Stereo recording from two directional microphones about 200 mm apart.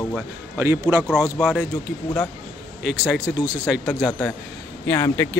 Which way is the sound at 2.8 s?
5° right (ahead or behind).